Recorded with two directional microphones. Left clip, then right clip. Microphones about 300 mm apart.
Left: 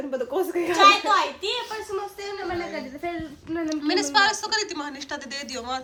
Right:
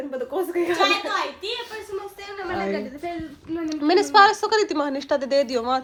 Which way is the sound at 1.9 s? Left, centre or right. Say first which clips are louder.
Left 1 dB; centre.